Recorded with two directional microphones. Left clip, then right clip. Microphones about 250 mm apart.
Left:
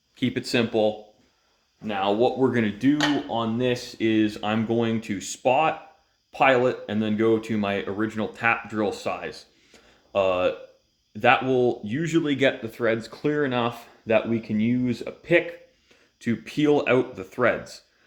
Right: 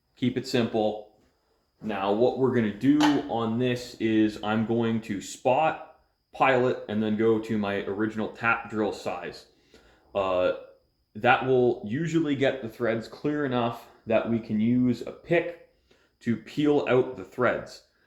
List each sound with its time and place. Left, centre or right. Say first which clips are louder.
0.2 s speech: left 2 dB; left
2.0 s speech: left 2 dB; left